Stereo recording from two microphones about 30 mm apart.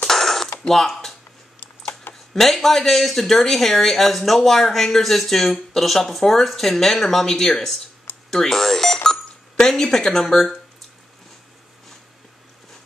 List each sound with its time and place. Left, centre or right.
0.0 s mechanisms: centre
2.3 s speech: centre
8.3 s telephone dialing: centre
10.3 s speech: centre